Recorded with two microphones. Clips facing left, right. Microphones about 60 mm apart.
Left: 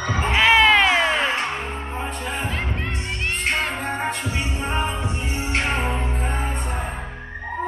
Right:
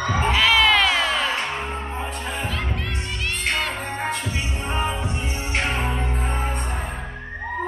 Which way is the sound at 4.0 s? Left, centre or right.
Centre.